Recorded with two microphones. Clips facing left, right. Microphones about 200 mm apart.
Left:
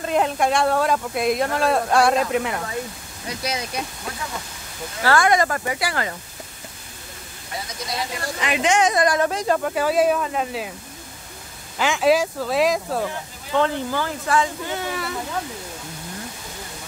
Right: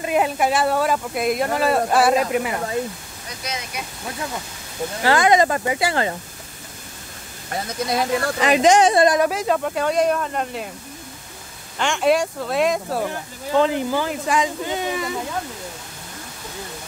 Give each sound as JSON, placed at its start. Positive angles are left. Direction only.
{"t": 0.0, "sound": "speech", "side_deg": -5}
{"t": 5.0, "sound": "speech", "side_deg": -20}
{"t": 7.9, "sound": "speech", "side_deg": -40}
{"t": 9.2, "sound": "speech", "side_deg": -5}
{"t": 11.8, "sound": "speech", "side_deg": 0}
{"t": 13.6, "sound": "speech", "side_deg": -15}